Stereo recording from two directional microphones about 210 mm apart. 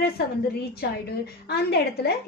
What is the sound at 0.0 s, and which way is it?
A woman's voice, 50° left (ahead or behind).